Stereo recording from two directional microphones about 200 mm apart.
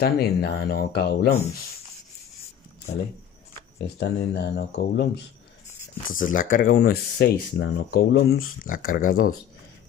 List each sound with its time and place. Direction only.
0.0 s speech: 55° left (ahead or behind)
3.7 s speech: 55° left (ahead or behind)
6.0 s speech: 40° left (ahead or behind)